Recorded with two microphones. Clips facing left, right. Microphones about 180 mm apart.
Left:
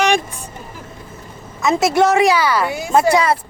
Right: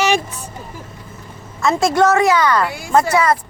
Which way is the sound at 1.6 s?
10° left (ahead or behind).